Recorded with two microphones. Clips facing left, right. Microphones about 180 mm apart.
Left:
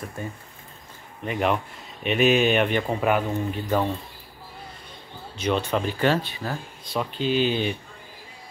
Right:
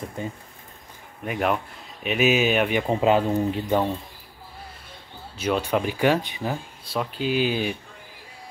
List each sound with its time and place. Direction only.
0.2 s speech: 20° right (ahead or behind)
1.2 s speech: 5° right (ahead or behind)
2.9 s speech: 20° right (ahead or behind)
3.6 s speech: 10° right (ahead or behind)
5.4 s speech: 10° right (ahead or behind)
6.9 s speech: 5° right (ahead or behind)